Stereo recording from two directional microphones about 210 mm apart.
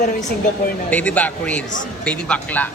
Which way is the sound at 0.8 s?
5° left (ahead or behind).